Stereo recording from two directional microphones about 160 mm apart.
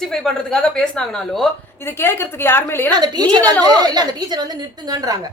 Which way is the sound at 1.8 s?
15° left (ahead or behind).